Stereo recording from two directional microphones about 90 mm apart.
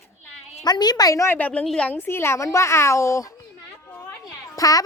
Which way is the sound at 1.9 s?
25° left (ahead or behind).